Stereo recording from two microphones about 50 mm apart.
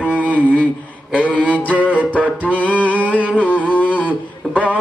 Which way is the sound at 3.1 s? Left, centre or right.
Left.